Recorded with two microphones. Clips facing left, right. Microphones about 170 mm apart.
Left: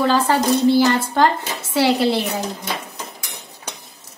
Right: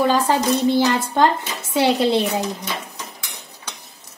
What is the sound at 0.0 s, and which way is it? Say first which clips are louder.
Speech: even; 15° right (ahead or behind).